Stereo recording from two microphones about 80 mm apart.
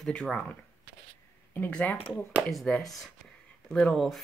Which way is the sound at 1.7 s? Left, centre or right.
Centre.